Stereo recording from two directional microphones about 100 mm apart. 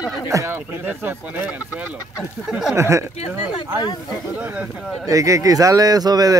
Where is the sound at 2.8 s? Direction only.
30° right (ahead or behind).